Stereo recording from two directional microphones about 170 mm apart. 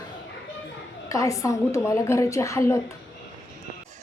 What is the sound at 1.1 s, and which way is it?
A woman's voice, 20° left (ahead or behind).